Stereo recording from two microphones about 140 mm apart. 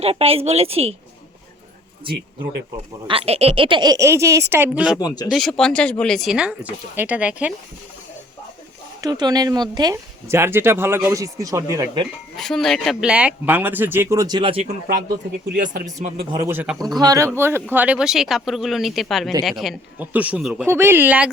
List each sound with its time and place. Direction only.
0.0 s a woman's voice: 45° right (ahead or behind)
3.1 s speech: 45° right (ahead or behind); by 4.9 s 10° right (ahead or behind)
4.9 s speech: 30° left (ahead or behind)
5.3 s speech: 5° left (ahead or behind)
9.0 s speech: 30° right (ahead or behind)
12.4 s speech: 5° left (ahead or behind); by 14.6 s 35° right (ahead or behind)
15.6 s speech: 70° right (ahead or behind)
16.4 s speech: 15° right (ahead or behind)
16.7 s speech: 30° right (ahead or behind); by 21.2 s 10° right (ahead or behind)